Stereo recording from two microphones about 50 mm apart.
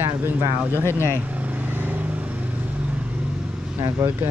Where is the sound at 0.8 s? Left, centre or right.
Left.